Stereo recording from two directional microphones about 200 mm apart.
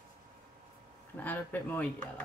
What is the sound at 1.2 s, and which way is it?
A woman's voice, 10° left (ahead or behind).